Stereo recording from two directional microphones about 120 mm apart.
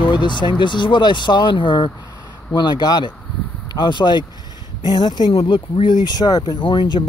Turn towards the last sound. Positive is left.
turn(degrees=40)  # may be behind; listen again after turning